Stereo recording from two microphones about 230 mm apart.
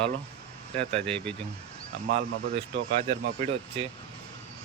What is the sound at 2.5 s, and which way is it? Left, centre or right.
Speech, right.